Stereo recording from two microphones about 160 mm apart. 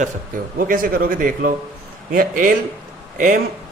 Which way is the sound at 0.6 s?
60° right (ahead or behind).